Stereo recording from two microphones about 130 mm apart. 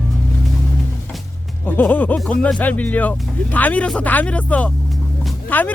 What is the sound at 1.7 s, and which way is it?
Speech, 15° left (ahead or behind).